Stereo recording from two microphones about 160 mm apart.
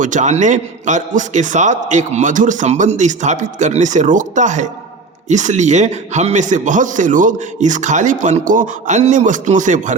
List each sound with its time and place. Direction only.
0.0 s a man's voice: 50° right (ahead or behind)